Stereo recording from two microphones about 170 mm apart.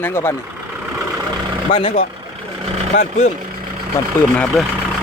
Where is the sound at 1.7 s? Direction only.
35° left (ahead or behind).